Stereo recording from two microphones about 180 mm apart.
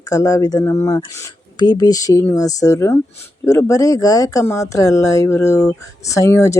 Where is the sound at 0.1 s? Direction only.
15° left (ahead or behind).